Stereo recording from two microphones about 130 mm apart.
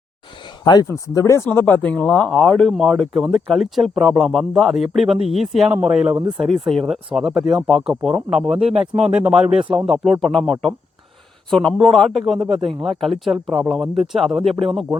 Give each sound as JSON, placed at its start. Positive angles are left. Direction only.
{"t": 0.6, "sound": "speech", "side_deg": 35}
{"t": 0.9, "sound": "speech", "side_deg": 25}
{"t": 8.7, "sound": "speech", "side_deg": -45}
{"t": 9.0, "sound": "speech", "side_deg": -5}